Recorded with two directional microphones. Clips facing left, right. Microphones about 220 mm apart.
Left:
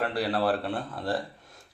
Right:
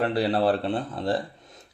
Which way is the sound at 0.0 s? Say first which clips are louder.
Right 4 dB; 25° right (ahead or behind).